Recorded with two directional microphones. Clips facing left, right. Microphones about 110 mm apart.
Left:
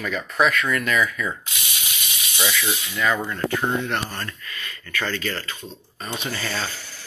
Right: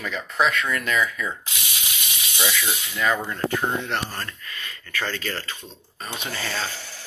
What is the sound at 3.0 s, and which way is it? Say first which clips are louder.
Speech: even; 25° right (ahead or behind).